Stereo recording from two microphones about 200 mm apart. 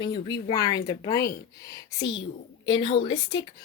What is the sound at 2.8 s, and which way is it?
Speech, 25° left (ahead or behind).